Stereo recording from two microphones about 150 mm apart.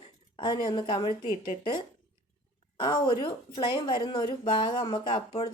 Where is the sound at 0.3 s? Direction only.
30° left (ahead or behind).